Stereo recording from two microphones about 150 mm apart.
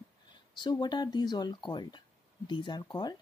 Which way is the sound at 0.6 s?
30° left (ahead or behind).